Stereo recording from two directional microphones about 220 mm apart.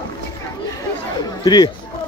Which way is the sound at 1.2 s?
20° left (ahead or behind).